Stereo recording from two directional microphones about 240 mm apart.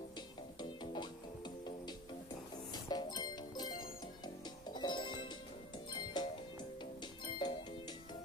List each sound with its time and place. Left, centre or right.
0.6 s music: centre
2.7 s music: centre
4.7 s music: centre